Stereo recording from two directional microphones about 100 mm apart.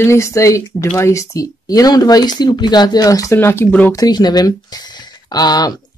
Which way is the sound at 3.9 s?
45° left (ahead or behind).